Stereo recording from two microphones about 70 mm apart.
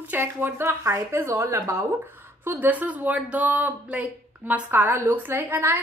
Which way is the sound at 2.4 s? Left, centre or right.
Right.